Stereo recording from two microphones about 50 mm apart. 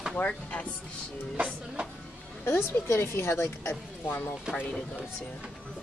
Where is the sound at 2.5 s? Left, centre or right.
Left.